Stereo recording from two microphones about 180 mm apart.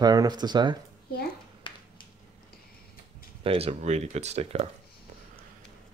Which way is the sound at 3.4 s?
35° right (ahead or behind).